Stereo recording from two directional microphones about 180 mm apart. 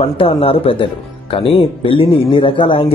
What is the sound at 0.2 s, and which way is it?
A man's voice, 30° left (ahead or behind).